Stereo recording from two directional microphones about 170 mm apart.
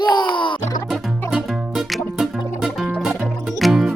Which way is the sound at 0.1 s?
25° left (ahead or behind).